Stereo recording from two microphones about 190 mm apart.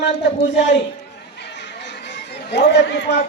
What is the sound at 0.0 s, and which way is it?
Speech, 65° left (ahead or behind).